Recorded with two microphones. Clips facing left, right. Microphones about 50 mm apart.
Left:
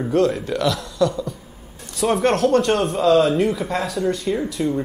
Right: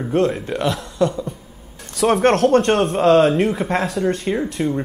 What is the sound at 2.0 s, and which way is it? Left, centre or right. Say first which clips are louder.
Speech: right 3 dB; right.